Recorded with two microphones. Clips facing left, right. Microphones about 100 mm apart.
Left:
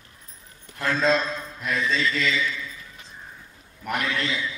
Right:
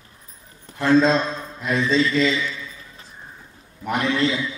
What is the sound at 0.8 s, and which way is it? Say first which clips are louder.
A man's voice: right 6 dB; 30° right (ahead or behind).